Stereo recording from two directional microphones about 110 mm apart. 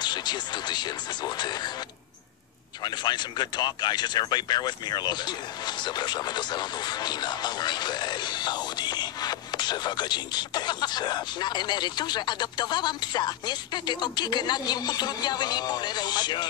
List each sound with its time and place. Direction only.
0.0 s speech: 40° left (ahead or behind)
2.8 s speech: 40° left (ahead or behind)